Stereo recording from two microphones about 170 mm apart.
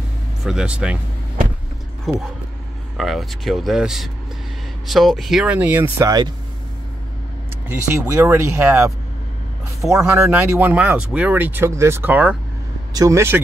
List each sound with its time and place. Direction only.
0.4 s speech: 5° right (ahead or behind)
2.1 s speech: centre (ahead or behind); by 6.3 s 20° right (ahead or behind)
8.1 s speech: 10° right (ahead or behind)